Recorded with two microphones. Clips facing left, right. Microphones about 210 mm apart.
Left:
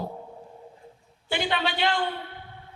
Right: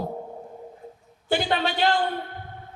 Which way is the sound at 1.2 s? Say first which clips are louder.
Right 3 dB; 40° right (ahead or behind).